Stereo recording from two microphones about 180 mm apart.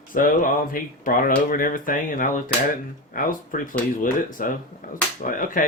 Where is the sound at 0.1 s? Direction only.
50° left (ahead or behind).